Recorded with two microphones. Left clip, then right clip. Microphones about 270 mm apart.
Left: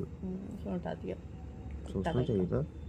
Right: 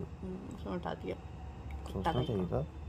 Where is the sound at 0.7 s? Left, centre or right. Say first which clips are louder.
Even; right.